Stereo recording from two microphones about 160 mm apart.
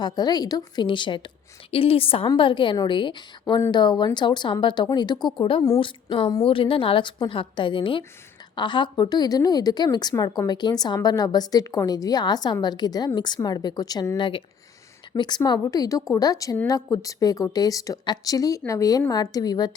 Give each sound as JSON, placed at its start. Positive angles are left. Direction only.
{"t": 0.0, "sound": "a woman's voice", "side_deg": 25}